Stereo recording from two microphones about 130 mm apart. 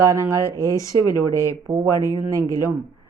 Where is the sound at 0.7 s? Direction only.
25° left (ahead or behind).